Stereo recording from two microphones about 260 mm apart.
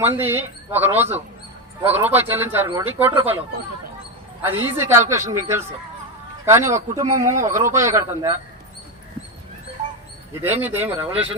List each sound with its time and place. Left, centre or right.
0.0 s speech: centre
4.4 s a man's voice: centre
10.4 s speech: centre